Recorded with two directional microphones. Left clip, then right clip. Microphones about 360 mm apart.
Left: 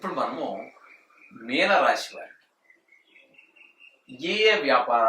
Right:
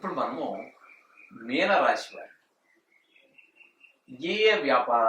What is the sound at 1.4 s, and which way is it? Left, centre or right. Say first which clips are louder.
Speech: left 2 dB; centre.